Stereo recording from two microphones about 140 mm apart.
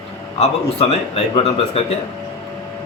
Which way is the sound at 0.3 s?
45° left (ahead or behind).